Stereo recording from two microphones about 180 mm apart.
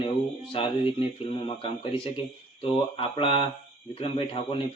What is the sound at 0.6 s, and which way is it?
A man's voice, 30° left (ahead or behind).